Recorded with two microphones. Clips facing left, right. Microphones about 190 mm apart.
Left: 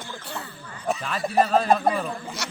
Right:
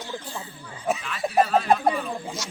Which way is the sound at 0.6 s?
10° right (ahead or behind).